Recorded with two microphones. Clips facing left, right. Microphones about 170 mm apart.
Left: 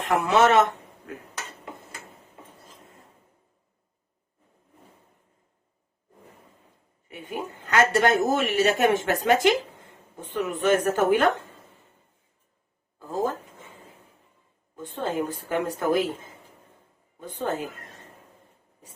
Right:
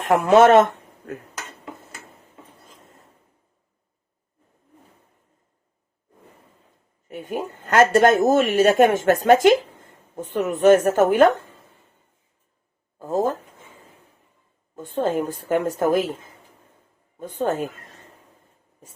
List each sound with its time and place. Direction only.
0.0 s speech: 50° right (ahead or behind)
7.1 s speech: 45° right (ahead or behind)
13.0 s speech: 45° right (ahead or behind)
15.0 s speech: 45° right (ahead or behind)
17.2 s speech: 45° right (ahead or behind)